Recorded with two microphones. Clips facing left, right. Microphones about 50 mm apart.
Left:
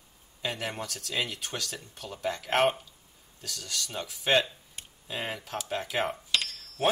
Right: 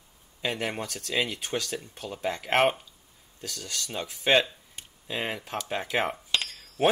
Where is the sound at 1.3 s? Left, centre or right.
Right.